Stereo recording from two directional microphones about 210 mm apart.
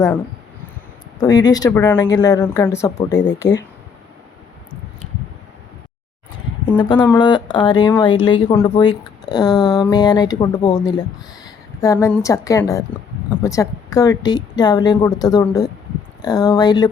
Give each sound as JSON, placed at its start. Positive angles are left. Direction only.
{"t": 1.2, "sound": "a woman's voice", "side_deg": 20}
{"t": 6.7, "sound": "speech", "side_deg": 20}
{"t": 11.4, "sound": "a sound", "side_deg": 15}
{"t": 12.2, "sound": "a woman's voice", "side_deg": 15}